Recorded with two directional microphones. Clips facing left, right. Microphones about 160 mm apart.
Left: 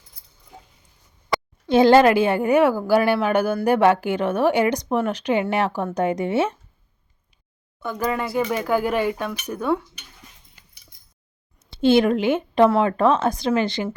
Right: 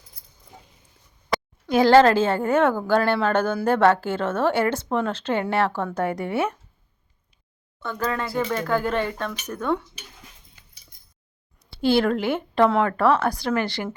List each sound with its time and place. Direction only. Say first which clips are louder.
1.6 s a woman's voice: left 1 dB; 25° left (ahead or behind)
7.8 s a woman's voice: left 2 dB; 10° left (ahead or behind)
11.6 s speech: left 3 dB; 20° left (ahead or behind)